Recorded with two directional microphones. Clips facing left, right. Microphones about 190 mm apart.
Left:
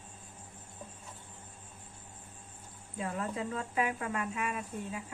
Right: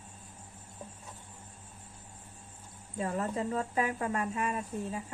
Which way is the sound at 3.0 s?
40° right (ahead or behind).